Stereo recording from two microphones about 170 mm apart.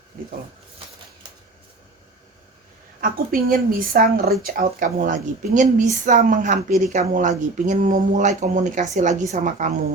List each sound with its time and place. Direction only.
3.0 s speech: 55° right (ahead or behind)